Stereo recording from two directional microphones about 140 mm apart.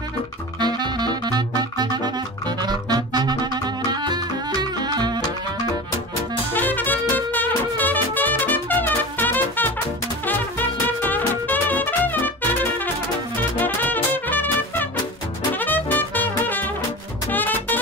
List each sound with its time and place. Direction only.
0.6 s music: 30° right (ahead or behind)
6.5 s music: 15° left (ahead or behind)
13.4 s music: 10° left (ahead or behind)